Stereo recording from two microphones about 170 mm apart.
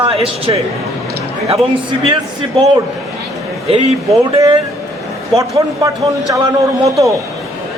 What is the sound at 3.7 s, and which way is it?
Speech, 35° right (ahead or behind).